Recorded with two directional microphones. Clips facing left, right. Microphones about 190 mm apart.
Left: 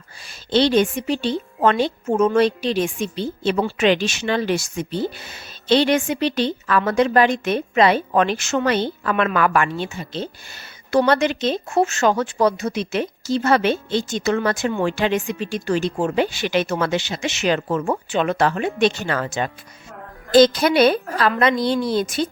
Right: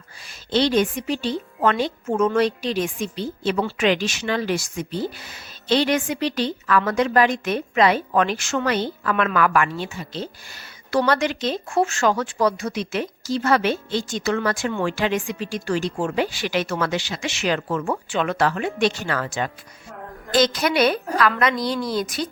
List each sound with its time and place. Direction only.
0.5 s speech: 30° left (ahead or behind)